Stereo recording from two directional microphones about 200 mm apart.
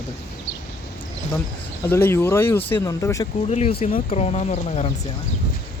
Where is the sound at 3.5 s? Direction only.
30° left (ahead or behind).